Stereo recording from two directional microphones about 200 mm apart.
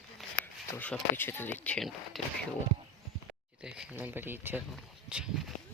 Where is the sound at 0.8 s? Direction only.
10° left (ahead or behind).